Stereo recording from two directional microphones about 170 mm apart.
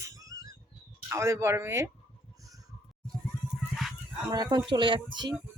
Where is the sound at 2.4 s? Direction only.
20° right (ahead or behind).